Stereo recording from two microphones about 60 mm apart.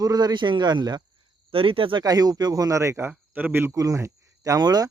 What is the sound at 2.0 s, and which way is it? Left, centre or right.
Speech, right.